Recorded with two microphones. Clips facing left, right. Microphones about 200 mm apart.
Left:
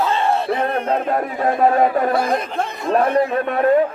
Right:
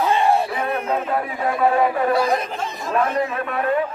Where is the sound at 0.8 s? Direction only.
40° left (ahead or behind); by 2.7 s 55° left (ahead or behind).